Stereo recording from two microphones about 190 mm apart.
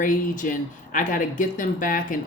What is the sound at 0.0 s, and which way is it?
Speech, 45° left (ahead or behind).